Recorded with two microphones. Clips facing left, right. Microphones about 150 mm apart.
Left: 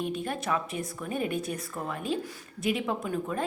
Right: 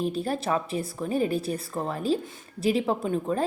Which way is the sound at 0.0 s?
35° right (ahead or behind).